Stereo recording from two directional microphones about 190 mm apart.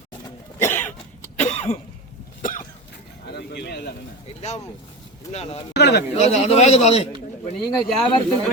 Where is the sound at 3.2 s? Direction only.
60° left (ahead or behind).